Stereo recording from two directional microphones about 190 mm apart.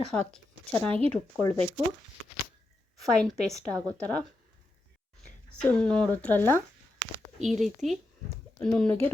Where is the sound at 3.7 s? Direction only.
20° right (ahead or behind).